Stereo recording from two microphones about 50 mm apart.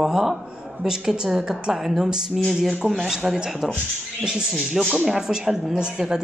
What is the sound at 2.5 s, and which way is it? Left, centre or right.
Speech, centre.